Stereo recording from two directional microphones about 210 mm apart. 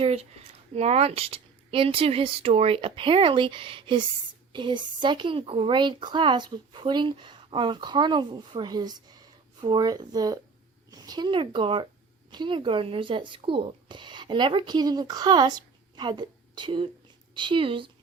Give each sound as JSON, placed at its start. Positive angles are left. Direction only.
{"t": 0.0, "sound": "speech", "side_deg": -30}